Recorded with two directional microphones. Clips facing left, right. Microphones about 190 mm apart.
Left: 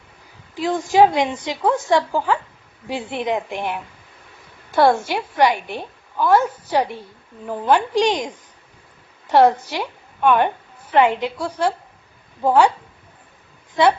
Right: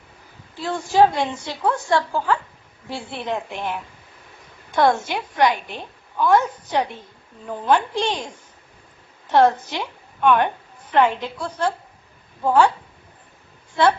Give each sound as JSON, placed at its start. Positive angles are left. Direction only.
{"t": 0.5, "sound": "a woman's voice", "side_deg": 15}
{"t": 7.9, "sound": "a woman's voice", "side_deg": 15}
{"t": 9.3, "sound": "a woman's voice", "side_deg": 10}
{"t": 13.8, "sound": "a woman's voice", "side_deg": 15}